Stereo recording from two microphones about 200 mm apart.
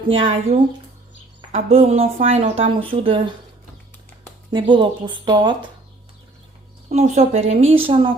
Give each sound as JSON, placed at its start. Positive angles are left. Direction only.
{"t": 0.1, "sound": "a woman's voice", "side_deg": -25}
{"t": 4.5, "sound": "speech", "side_deg": -25}
{"t": 6.9, "sound": "speech", "side_deg": -30}